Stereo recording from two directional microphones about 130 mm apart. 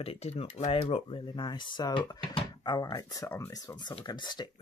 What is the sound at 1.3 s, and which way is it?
Speech, 35° left (ahead or behind).